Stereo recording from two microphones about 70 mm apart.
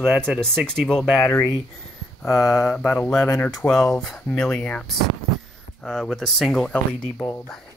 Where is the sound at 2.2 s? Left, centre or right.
Left.